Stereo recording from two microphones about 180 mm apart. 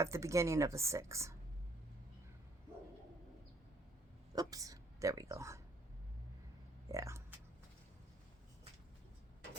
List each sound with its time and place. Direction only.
0.0 s speech: 15° right (ahead or behind)
4.4 s speech: 20° right (ahead or behind)
6.8 s a sound: 15° right (ahead or behind)